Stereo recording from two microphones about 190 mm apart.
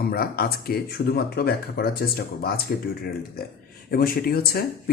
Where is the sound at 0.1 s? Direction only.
50° left (ahead or behind).